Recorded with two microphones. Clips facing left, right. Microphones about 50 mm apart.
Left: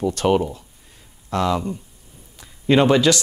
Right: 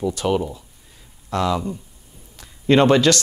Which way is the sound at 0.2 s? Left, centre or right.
Left.